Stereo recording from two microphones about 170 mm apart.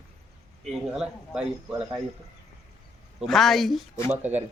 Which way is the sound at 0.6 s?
Centre (ahead or behind).